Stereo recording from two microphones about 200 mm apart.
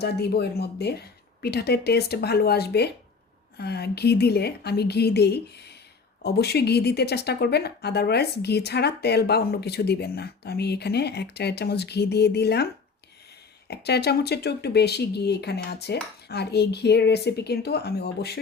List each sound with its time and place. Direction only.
0.0 s speech: 55° left (ahead or behind)
13.7 s speech: 55° left (ahead or behind)